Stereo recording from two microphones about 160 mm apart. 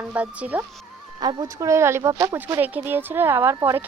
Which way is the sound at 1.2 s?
25° right (ahead or behind).